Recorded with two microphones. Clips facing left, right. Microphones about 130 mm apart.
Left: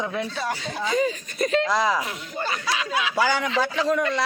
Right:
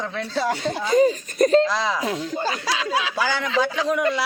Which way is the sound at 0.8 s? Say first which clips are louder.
Right 6 dB; 40° right (ahead or behind).